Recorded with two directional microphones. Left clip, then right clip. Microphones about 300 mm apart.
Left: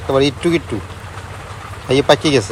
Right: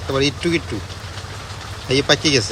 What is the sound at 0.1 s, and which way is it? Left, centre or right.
Speech, centre.